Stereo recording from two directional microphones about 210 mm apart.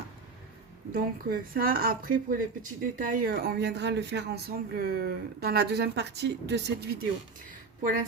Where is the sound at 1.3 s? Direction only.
45° right (ahead or behind).